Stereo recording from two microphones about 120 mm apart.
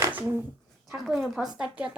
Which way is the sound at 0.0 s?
15° right (ahead or behind).